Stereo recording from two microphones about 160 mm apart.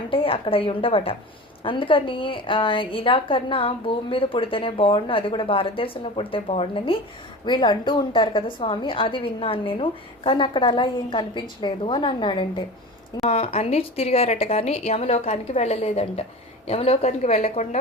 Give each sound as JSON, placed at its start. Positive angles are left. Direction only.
{"t": 0.1, "sound": "a woman's voice", "side_deg": 35}